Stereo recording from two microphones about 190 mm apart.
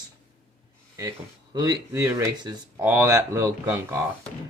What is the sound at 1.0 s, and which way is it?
Speech, 20° right (ahead or behind).